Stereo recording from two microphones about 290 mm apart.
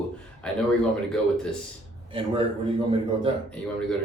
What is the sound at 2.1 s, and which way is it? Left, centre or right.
Speech, centre.